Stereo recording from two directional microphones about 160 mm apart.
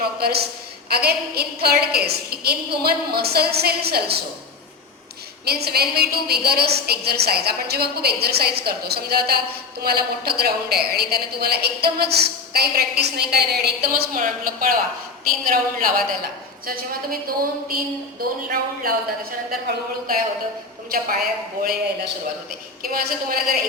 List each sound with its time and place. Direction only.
0.0 s a woman's voice: 80° right
5.5 s a woman's voice: 80° right
22.8 s a woman's voice: 65° right (ahead or behind)